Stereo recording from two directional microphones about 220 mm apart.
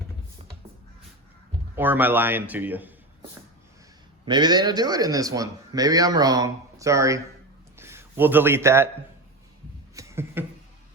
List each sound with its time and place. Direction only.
1.7 s a man's voice: 10° right (ahead or behind)
4.3 s a man's voice: 20° right (ahead or behind)
9.9 s a sound: 15° right (ahead or behind)